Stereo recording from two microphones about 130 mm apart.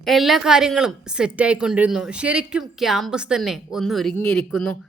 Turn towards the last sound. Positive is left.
turn(degrees=0)  # may be behind; listen again after turning